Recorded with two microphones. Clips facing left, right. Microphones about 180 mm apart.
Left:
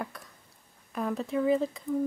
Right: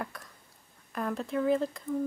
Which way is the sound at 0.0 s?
Centre (ahead or behind).